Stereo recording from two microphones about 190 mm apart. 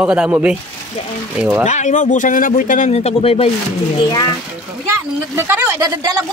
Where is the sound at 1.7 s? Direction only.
40° left (ahead or behind).